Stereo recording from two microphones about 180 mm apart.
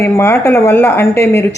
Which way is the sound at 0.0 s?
15° left (ahead or behind).